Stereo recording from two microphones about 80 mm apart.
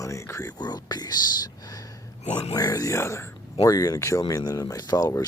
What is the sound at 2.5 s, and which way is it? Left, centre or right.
Speech, left.